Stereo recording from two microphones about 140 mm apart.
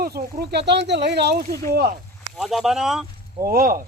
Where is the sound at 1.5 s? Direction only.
90° right.